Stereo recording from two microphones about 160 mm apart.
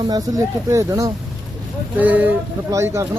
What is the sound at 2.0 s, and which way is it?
Speech, 10° right (ahead or behind).